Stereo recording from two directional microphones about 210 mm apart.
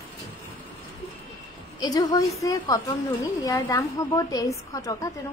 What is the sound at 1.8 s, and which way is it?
A woman's voice, 20° left (ahead or behind).